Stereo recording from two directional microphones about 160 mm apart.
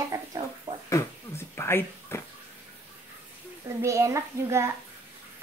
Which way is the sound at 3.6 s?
20° right (ahead or behind).